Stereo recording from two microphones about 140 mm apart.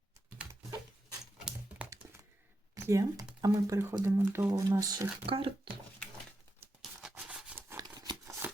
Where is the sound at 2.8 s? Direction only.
25° right (ahead or behind).